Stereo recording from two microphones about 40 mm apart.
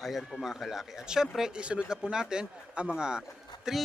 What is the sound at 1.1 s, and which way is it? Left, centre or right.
Speech, centre.